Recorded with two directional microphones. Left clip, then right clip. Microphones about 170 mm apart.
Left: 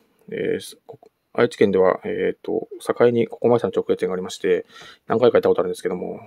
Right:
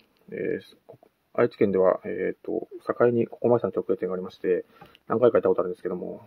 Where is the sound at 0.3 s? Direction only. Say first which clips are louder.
Left 6 dB; 25° left (ahead or behind).